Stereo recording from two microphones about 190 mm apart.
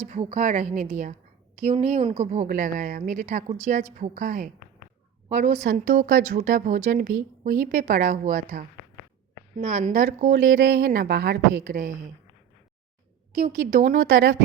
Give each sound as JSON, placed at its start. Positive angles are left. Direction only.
{"t": 0.1, "sound": "a woman's voice", "side_deg": -40}
{"t": 9.8, "sound": "speech", "side_deg": -45}
{"t": 13.3, "sound": "speech", "side_deg": -40}